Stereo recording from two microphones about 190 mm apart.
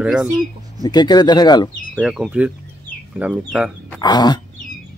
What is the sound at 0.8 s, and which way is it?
Snicker, 20° left (ahead or behind).